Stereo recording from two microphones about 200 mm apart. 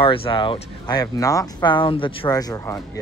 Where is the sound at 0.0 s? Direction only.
25° left (ahead or behind).